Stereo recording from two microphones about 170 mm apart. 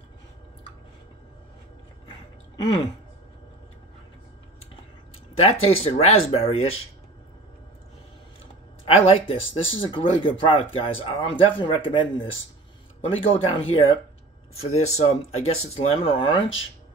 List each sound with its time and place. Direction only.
2.5 s speech: 25° left (ahead or behind)
5.4 s speech: 35° left (ahead or behind)
8.8 s speech: 35° left (ahead or behind)
13.3 s speech: 35° left (ahead or behind)